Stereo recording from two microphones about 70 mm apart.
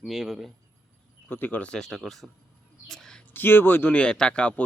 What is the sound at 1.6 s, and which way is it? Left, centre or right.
Speech, centre.